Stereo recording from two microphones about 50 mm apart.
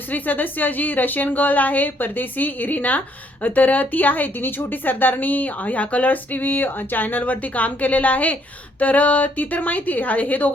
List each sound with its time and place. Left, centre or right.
0.1 s speech: left